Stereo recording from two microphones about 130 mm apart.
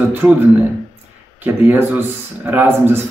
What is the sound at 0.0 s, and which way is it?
Speech, 15° right (ahead or behind).